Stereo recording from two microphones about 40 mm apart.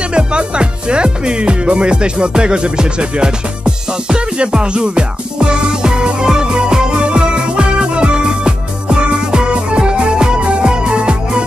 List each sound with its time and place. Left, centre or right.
0.1 s speech: right
5.4 s music: centre